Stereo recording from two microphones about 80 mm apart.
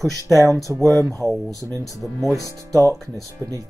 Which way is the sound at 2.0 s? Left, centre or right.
Centre.